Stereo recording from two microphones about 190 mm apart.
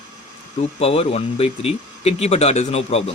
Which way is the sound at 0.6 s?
30° left (ahead or behind).